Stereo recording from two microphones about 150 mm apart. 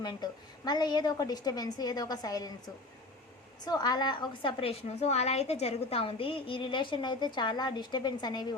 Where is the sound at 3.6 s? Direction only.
25° left (ahead or behind).